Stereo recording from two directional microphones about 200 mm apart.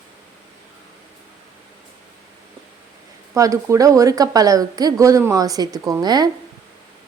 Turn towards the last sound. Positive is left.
turn(degrees=-20)  # may be behind; listen again after turning